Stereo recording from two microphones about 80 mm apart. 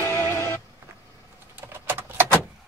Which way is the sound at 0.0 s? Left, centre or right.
Left.